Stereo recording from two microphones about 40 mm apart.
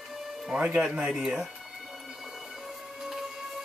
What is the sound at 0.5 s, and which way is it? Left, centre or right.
Music, right.